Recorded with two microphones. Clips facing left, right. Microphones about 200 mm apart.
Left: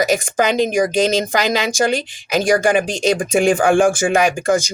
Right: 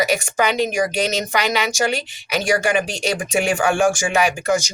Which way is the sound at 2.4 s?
50° left (ahead or behind).